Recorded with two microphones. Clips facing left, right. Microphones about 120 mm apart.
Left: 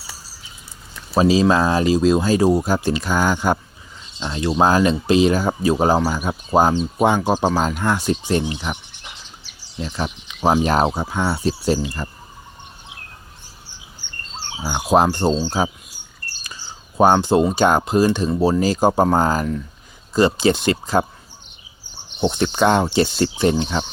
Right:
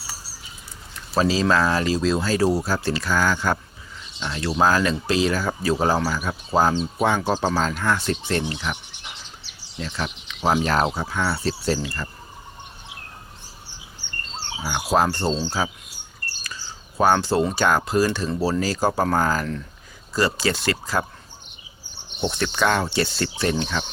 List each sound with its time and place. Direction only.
1.1 s speech: 15° left (ahead or behind)
14.6 s speech: 20° left (ahead or behind)
17.0 s speech: 20° left (ahead or behind)
22.2 s speech: 20° left (ahead or behind)